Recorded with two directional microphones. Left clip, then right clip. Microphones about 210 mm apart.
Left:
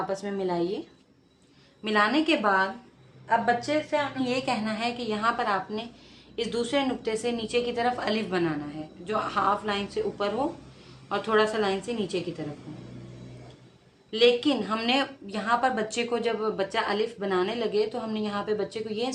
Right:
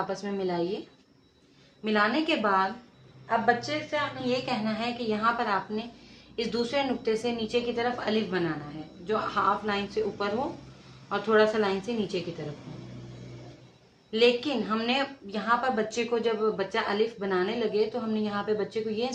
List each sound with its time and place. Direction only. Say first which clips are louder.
0.1 s a woman's voice: left 2 dB; 35° left (ahead or behind)
1.8 s a woman's voice: left 2 dB; 50° left (ahead or behind)
14.1 s a woman's voice: left 2 dB; 45° left (ahead or behind)